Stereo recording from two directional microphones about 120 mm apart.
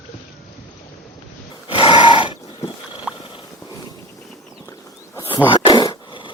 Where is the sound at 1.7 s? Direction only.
45° left (ahead or behind).